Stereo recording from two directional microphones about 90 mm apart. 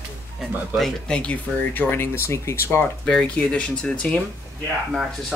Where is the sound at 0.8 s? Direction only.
10° left (ahead or behind); by 2.8 s 30° left (ahead or behind).